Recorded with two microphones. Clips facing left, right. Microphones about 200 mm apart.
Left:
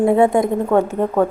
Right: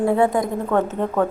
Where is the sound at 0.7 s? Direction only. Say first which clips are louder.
Left 3 dB; 10° left (ahead or behind).